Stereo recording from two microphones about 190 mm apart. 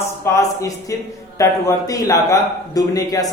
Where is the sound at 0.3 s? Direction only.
15° left (ahead or behind).